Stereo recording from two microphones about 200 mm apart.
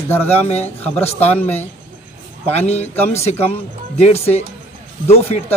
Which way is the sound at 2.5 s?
30° left (ahead or behind).